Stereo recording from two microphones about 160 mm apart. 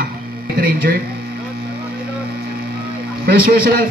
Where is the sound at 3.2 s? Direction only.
70° right (ahead or behind).